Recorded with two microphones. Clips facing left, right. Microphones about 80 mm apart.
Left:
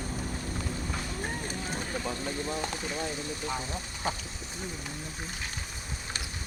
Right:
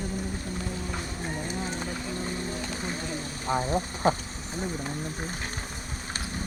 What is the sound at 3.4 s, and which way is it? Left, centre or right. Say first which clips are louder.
Speech: right 13 dB; right.